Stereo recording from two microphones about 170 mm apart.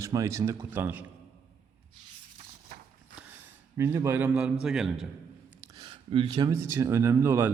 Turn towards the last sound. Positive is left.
turn(degrees=-15)  # may be behind; listen again after turning